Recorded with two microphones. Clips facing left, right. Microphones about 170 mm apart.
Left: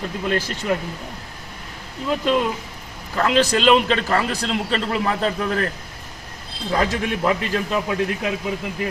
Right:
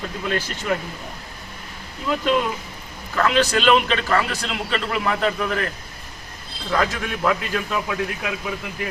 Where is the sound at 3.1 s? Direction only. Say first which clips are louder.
Left 1 dB; 30° left (ahead or behind).